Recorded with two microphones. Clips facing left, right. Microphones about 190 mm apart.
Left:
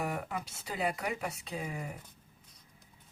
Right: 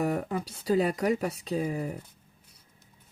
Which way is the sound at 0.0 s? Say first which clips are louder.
Right 7 dB; 35° right (ahead or behind).